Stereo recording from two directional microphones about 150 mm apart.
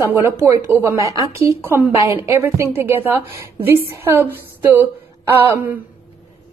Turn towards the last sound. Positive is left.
turn(degrees=-15)  # may be behind; listen again after turning